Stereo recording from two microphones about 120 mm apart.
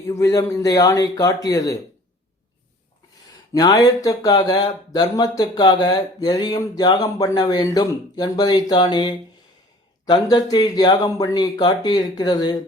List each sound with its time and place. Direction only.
0.1 s speech: 30° left (ahead or behind)
3.5 s speech: 35° left (ahead or behind)